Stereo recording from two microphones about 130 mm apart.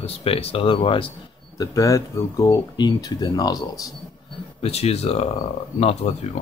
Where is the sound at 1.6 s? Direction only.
25° left (ahead or behind).